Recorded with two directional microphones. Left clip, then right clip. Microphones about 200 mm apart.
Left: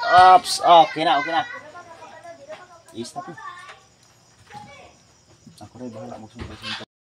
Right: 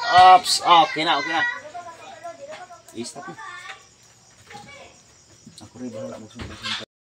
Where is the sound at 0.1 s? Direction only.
35° left (ahead or behind).